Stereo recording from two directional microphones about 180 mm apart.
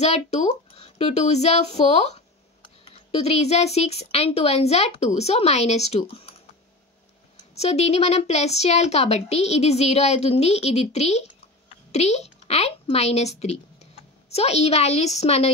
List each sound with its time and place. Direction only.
0.0 s a child's voice: 35° left (ahead or behind)
7.5 s a woman's voice: 35° left (ahead or behind)